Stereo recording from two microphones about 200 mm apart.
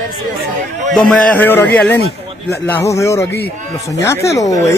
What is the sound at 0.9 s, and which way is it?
Speech, 5° left (ahead or behind).